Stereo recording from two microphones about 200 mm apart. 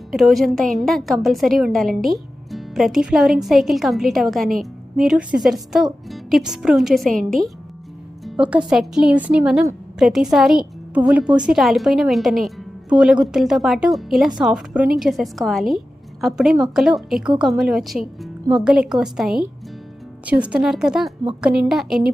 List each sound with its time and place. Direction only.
0.1 s a woman's voice: centre (ahead or behind)
7.1 s a woman's voice: 45° right (ahead or behind)
8.2 s a woman's voice: 5° right (ahead or behind)